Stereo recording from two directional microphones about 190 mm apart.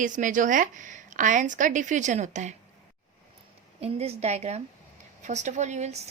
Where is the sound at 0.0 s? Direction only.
45° right (ahead or behind).